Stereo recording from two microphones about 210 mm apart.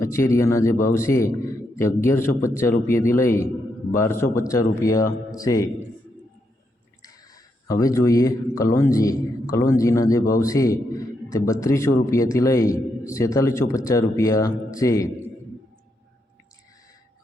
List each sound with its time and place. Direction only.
0.0 s a man's voice: 15° left (ahead or behind)
7.0 s a man's voice: 15° left (ahead or behind)